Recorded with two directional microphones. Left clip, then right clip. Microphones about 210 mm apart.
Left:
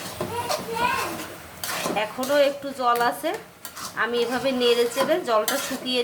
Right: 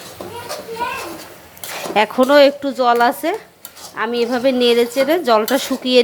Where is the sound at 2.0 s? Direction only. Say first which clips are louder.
Right 11 dB; 40° right (ahead or behind).